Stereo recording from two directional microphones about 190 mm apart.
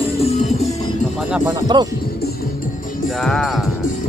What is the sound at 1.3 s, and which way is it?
Speech, 15° right (ahead or behind).